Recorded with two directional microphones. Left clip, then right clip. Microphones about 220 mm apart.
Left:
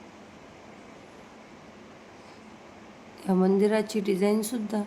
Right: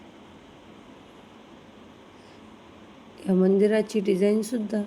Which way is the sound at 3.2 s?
10° right (ahead or behind).